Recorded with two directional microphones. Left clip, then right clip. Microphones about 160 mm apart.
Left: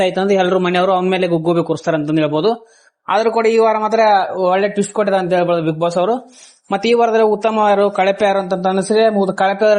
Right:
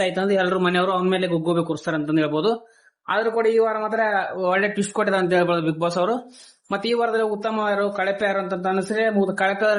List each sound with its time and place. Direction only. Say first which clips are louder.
0.0 s a man's voice: left 6 dB; 40° left (ahead or behind)
3.6 s a man's voice: left 8 dB; 35° left (ahead or behind)
4.4 s a man's voice: left 6 dB; 20° left (ahead or behind)
6.7 s a man's voice: left 8 dB; 35° left (ahead or behind)